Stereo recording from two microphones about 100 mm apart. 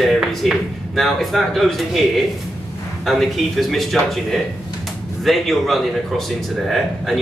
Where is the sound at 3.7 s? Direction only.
Centre (ahead or behind).